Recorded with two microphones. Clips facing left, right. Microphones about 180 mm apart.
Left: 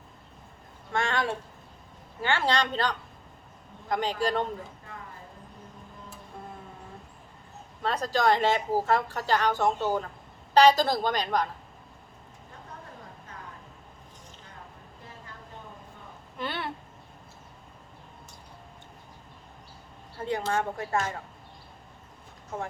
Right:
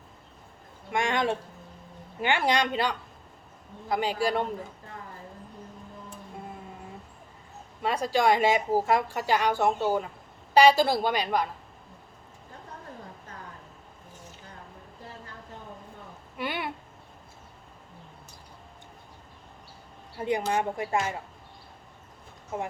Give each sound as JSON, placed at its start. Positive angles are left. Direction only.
{"t": 0.9, "sound": "a sound", "side_deg": -15}
{"t": 2.2, "sound": "a woman's voice", "side_deg": -15}
{"t": 7.8, "sound": "a woman's voice", "side_deg": -10}
{"t": 16.4, "sound": "speech", "side_deg": -10}
{"t": 20.1, "sound": "a woman's voice", "side_deg": -15}